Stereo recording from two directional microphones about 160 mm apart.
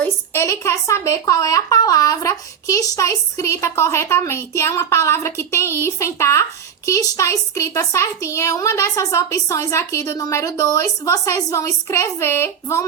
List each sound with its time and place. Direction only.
0.0 s speech: 15° left (ahead or behind)